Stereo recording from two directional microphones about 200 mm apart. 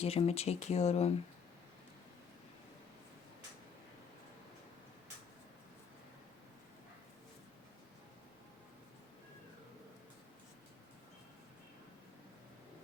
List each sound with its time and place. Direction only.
0.0 s speech: 30° left (ahead or behind)